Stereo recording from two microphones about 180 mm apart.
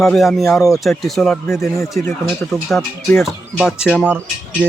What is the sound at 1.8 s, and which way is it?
Speech, 15° left (ahead or behind).